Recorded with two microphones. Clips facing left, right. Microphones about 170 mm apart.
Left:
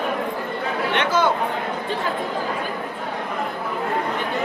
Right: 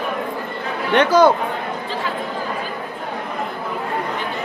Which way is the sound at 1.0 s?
40° right (ahead or behind).